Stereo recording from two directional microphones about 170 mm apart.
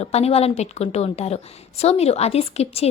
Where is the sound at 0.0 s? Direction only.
35° left (ahead or behind).